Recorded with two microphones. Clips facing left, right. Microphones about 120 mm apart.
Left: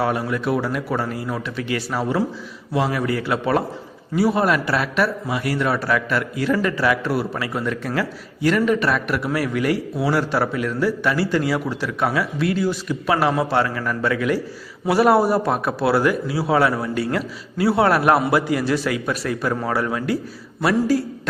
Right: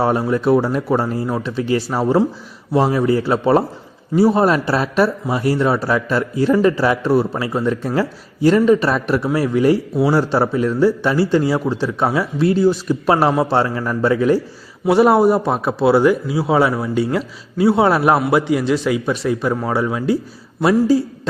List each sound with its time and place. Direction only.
0.0 s speech: 30° right (ahead or behind)